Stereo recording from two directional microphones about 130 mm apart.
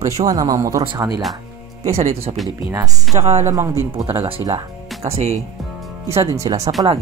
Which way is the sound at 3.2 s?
60° right (ahead or behind).